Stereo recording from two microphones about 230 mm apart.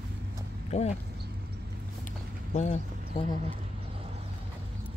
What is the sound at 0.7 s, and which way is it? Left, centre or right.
Speech, left.